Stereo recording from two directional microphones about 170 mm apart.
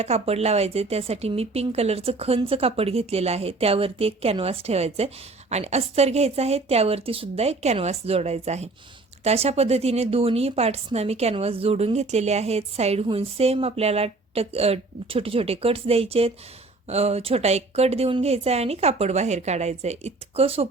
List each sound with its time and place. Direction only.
0.0 s speech: 40° right (ahead or behind)